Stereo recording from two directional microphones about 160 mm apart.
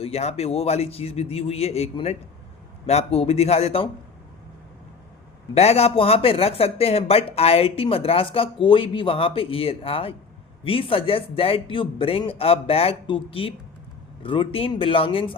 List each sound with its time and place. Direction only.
0.0 s speech: 40° left (ahead or behind)
5.5 s speech: 40° left (ahead or behind)